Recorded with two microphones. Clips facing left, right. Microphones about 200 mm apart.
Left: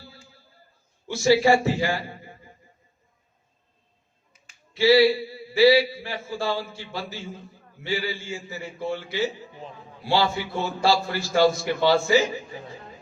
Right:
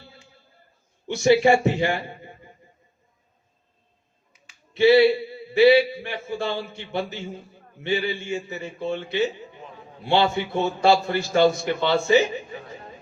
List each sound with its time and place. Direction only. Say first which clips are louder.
0.0 s a sound: left 1 dB; 20° right (ahead or behind)
1.0 s a man's voice: right 2 dB; 20° right (ahead or behind)
4.7 s a man's voice: right 2 dB; 20° right (ahead or behind)